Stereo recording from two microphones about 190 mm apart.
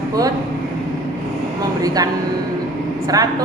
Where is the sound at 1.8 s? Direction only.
20° right (ahead or behind).